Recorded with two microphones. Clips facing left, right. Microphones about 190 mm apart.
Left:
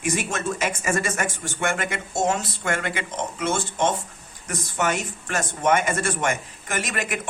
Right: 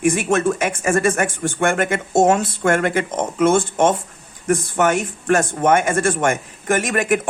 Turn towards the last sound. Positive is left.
turn(degrees=-50)  # may be behind; listen again after turning